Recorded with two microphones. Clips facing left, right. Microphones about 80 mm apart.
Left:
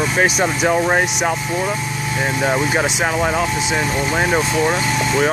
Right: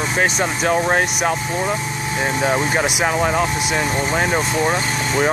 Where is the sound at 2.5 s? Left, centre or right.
Centre.